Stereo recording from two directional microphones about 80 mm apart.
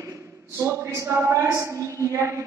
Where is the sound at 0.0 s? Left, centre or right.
Right.